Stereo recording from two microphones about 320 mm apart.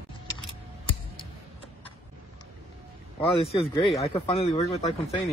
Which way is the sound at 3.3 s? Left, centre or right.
Centre.